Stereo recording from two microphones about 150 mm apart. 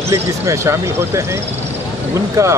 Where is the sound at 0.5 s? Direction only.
20° right (ahead or behind).